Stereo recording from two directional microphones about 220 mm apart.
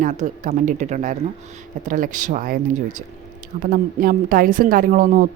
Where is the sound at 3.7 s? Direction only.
40° right (ahead or behind).